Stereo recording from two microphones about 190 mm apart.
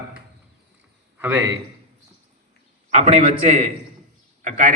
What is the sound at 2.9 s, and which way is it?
A man's voice, 35° right (ahead or behind).